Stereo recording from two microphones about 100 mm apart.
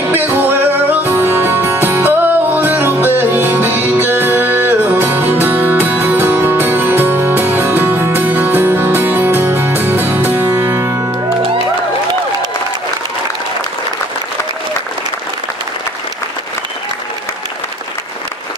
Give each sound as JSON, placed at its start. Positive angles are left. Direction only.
{"t": 0.1, "sound": "music", "side_deg": -20}